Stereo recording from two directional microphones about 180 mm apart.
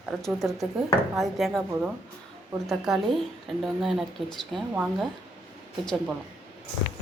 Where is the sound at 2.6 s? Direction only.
5° right (ahead or behind).